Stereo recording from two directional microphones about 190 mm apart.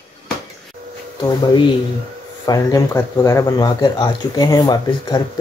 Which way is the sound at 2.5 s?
20° left (ahead or behind).